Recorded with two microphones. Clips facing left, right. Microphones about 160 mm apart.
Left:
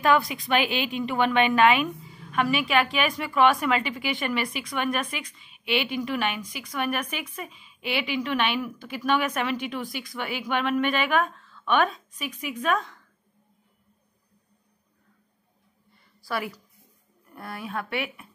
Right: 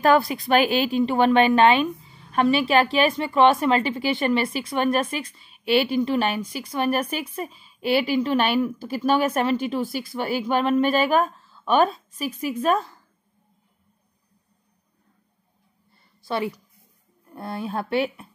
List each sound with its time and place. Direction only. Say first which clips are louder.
0.0 s a woman's voice: right 4 dB; 35° right (ahead or behind)
15.9 s a sound: right 4 dB; 25° right (ahead or behind)
17.3 s a woman's voice: right 5 dB; 25° right (ahead or behind)